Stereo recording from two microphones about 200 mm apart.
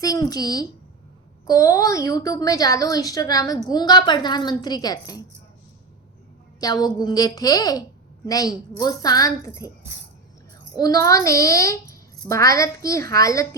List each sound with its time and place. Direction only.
0.0 s a woman's voice: 20° left (ahead or behind)
6.6 s a woman's voice: 20° left (ahead or behind)
10.8 s a child's voice: 20° left (ahead or behind)